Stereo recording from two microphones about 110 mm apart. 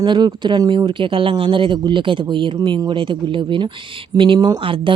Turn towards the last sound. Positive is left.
turn(degrees=-50)  # may be behind; listen again after turning